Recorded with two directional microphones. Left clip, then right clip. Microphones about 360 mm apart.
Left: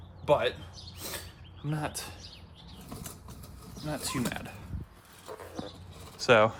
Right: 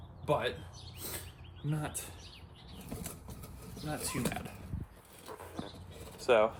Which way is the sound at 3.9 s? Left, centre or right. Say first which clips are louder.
Left 3 dB; left.